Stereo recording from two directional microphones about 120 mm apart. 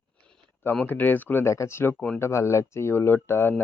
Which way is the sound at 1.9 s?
10° left (ahead or behind).